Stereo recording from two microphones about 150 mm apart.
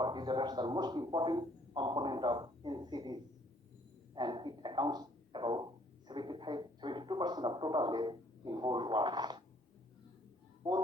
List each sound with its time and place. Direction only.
0.0 s a man's voice: 30° right (ahead or behind)
10.6 s speech: 30° right (ahead or behind)